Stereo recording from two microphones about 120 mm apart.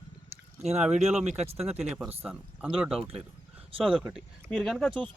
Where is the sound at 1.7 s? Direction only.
5° right (ahead or behind).